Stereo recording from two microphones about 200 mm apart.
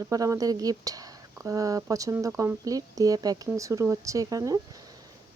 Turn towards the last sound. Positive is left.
turn(degrees=-20)  # may be behind; listen again after turning